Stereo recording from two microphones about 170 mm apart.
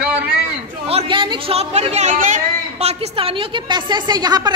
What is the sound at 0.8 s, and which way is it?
A woman's voice, 30° right (ahead or behind).